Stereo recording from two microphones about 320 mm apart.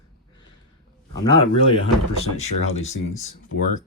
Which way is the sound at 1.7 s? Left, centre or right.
Centre.